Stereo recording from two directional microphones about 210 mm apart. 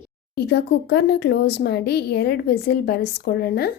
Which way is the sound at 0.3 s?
50° left (ahead or behind).